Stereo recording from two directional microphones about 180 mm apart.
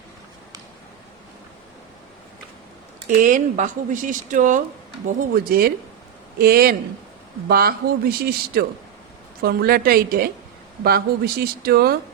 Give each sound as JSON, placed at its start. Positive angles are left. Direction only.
{"t": 3.1, "sound": "speech", "side_deg": -45}